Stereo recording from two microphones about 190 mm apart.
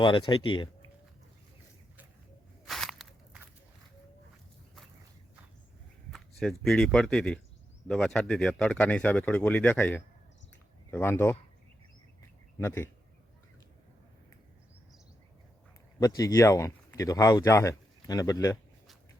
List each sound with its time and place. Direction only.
0.0 s speech: 25° left (ahead or behind)
2.6 s walk: centre (ahead or behind)
6.1 s speech: centre (ahead or behind)
12.5 s speech: 15° left (ahead or behind)
16.0 s speech: 20° left (ahead or behind)